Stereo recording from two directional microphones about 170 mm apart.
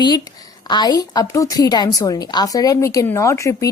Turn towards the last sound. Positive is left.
turn(degrees=15)  # may be behind; listen again after turning